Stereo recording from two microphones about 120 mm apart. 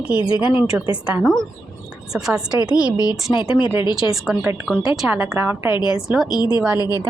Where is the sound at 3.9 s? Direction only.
5° right (ahead or behind).